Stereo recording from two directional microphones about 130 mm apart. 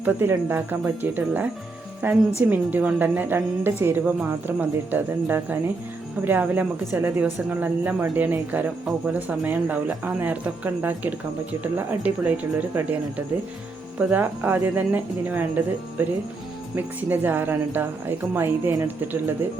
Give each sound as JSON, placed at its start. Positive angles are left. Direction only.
{"t": 0.0, "sound": "a woman's voice", "side_deg": -15}